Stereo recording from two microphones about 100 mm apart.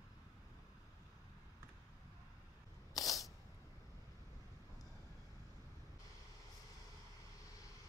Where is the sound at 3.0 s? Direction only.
Centre (ahead or behind).